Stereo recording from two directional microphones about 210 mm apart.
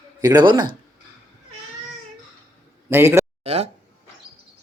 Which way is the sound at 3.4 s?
30° right (ahead or behind).